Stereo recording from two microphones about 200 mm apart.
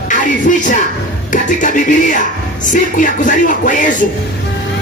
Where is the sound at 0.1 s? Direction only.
40° left (ahead or behind).